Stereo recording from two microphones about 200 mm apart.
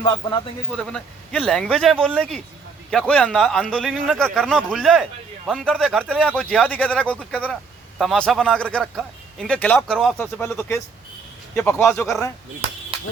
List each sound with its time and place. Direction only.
0.0 s a man's voice: 25° left (ahead or behind)
0.8 s a man's voice: 5° left (ahead or behind)